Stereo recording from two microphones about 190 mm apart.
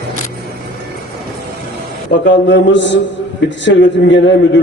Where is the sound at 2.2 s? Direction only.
70° left (ahead or behind).